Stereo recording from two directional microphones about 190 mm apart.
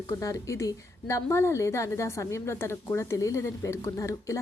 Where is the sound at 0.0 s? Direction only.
15° left (ahead or behind).